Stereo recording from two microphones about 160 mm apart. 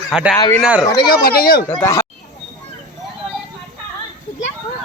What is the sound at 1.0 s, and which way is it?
Speech, 70° left (ahead or behind).